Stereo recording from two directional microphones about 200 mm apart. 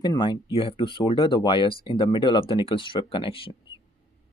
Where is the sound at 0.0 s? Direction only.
20° left (ahead or behind).